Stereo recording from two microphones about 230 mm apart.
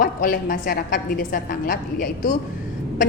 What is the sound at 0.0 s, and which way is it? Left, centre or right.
A woman's voice, left.